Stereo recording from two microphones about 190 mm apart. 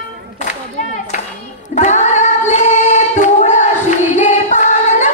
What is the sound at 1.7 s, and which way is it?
Singing, 40° left (ahead or behind).